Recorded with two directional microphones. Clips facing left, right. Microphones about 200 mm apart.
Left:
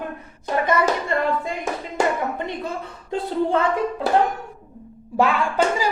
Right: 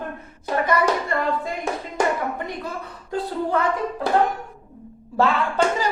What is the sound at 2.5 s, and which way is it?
A woman's voice, 25° left (ahead or behind).